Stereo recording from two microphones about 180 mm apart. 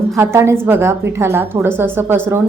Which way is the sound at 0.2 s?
15° right (ahead or behind).